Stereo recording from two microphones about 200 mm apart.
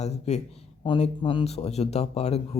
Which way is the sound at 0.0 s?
35° left (ahead or behind).